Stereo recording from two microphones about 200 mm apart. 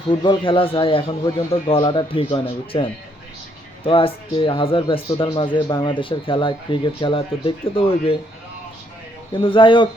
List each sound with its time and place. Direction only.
0.2 s speech: 25° left (ahead or behind)
9.3 s speech: 25° left (ahead or behind)